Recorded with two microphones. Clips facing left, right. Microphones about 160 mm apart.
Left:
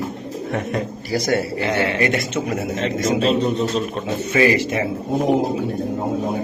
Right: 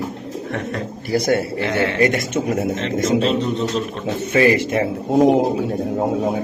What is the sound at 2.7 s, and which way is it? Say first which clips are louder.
Speech: right 1 dB; 50° left (ahead or behind).